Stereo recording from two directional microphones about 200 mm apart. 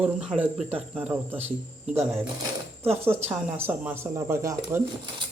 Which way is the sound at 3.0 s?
10° right (ahead or behind).